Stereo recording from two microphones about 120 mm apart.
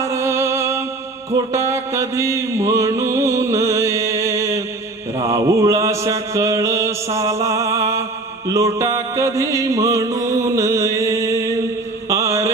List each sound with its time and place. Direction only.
0.0 s music: 25° right (ahead or behind)
5.2 s chant: 25° right (ahead or behind)
8.5 s music: 25° right (ahead or behind)
12.0 s mantra: 25° right (ahead or behind)